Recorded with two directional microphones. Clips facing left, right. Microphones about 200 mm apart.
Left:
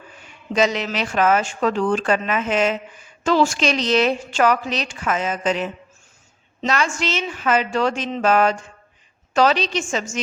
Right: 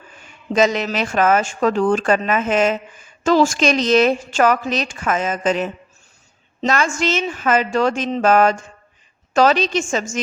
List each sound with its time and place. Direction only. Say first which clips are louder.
0.5 s speech: right 3 dB; 45° right (ahead or behind)